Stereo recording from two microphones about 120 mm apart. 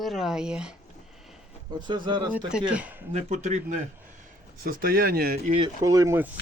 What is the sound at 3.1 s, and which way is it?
Speech, 70° right (ahead or behind).